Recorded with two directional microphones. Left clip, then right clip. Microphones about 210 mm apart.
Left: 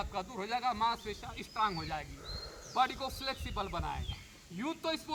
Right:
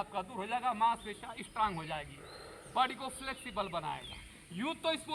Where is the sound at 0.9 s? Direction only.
30° left (ahead or behind).